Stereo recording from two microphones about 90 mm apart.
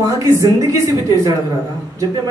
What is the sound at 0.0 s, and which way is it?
A man's voice, 35° right (ahead or behind).